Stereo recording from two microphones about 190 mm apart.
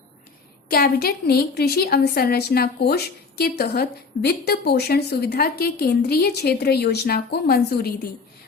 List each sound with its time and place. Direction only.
0.7 s a woman's voice: 55° left (ahead or behind)